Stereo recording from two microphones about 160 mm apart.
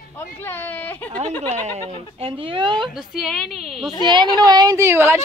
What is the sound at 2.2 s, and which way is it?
Speech, 35° right (ahead or behind).